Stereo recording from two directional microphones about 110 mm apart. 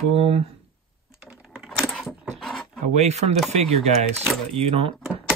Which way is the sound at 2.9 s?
90° right.